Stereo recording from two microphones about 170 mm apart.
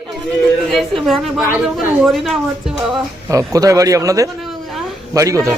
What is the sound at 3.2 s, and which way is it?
A man's voice, 20° right (ahead or behind).